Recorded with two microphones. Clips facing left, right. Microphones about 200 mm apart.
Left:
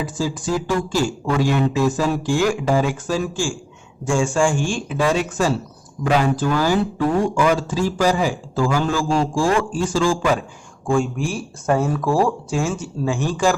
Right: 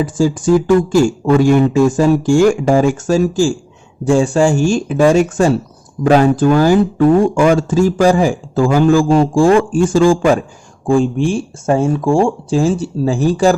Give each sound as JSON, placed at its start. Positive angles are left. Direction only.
{"t": 0.0, "sound": "speech", "side_deg": -50}
{"t": 10.8, "sound": "speech", "side_deg": -30}